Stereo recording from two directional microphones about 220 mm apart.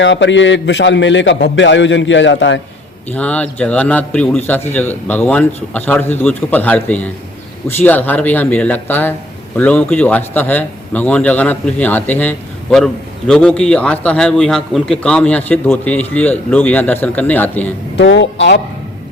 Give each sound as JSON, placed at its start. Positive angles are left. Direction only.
{"t": 0.0, "sound": "a man's voice", "side_deg": 55}
{"t": 3.1, "sound": "a man's voice", "side_deg": 5}
{"t": 17.9, "sound": "a man's voice", "side_deg": 55}